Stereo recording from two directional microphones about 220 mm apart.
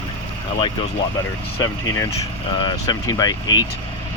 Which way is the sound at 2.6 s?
20° left (ahead or behind).